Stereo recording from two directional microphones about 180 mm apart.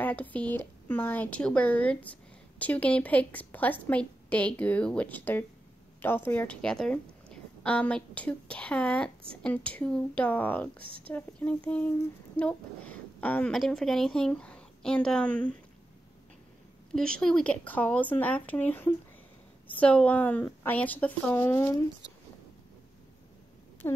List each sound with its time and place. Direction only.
0.0 s a woman's voice: 10° left (ahead or behind)
16.9 s a woman's voice: 5° left (ahead or behind)